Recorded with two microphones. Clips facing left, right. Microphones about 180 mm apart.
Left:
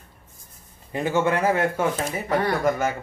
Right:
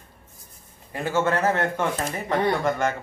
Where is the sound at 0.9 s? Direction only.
15° left (ahead or behind).